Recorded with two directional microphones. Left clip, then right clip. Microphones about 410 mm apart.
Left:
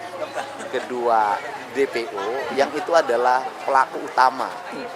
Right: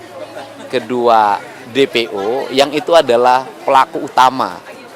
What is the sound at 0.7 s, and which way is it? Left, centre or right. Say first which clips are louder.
Speech: right 9 dB; right.